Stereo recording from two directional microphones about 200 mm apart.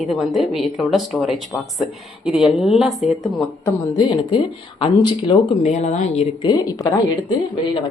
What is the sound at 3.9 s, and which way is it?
Speech, 20° left (ahead or behind).